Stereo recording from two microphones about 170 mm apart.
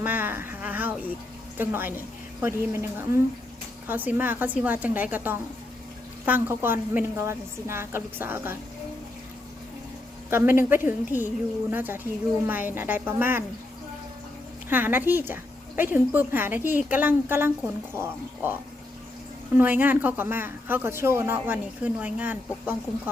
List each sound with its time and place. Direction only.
0.0 s speech: 10° right (ahead or behind)
10.2 s speech: 15° right (ahead or behind)
14.7 s speech: 10° right (ahead or behind)
19.5 s speech: 10° right (ahead or behind)